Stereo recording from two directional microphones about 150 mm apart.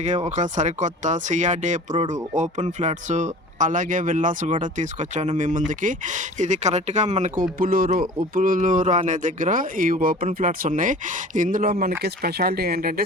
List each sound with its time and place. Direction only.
0.0 s speech: 50° right (ahead or behind)
7.6 s speech: 70° right (ahead or behind)